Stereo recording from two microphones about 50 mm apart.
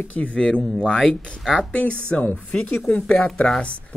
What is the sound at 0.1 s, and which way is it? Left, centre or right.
Speech, left.